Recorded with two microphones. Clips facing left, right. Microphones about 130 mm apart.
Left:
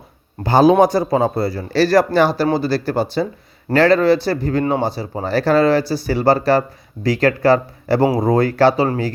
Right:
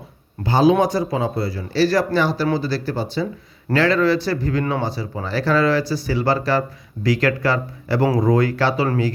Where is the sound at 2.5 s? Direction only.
60° left (ahead or behind).